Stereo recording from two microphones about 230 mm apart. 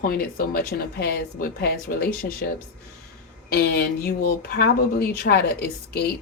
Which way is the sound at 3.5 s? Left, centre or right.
Left.